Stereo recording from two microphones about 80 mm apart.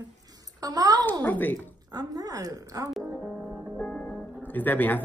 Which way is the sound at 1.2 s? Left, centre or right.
Left.